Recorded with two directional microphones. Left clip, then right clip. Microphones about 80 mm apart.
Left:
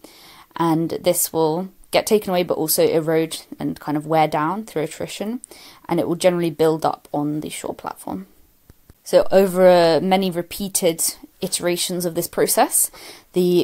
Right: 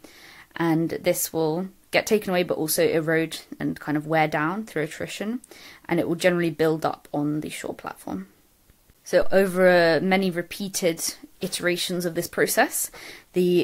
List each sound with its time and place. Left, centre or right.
0.8 s speech: left